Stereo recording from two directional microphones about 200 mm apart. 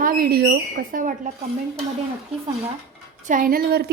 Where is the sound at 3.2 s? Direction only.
45° right (ahead or behind).